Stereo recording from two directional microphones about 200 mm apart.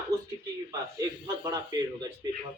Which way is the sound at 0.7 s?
20° right (ahead or behind).